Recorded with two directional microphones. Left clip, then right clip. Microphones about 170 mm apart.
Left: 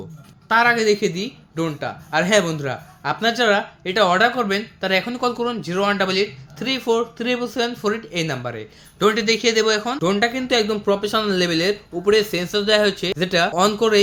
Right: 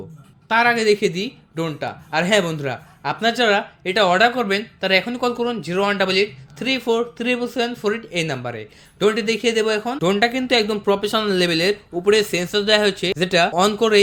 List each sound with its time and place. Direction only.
0.4 s speech: 15° right (ahead or behind)